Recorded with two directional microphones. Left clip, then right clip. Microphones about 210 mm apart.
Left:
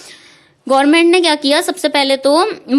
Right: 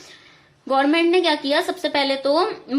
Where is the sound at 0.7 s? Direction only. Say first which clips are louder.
Left 7 dB; 50° left (ahead or behind).